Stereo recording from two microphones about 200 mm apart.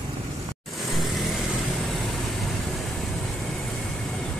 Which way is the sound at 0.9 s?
Centre (ahead or behind).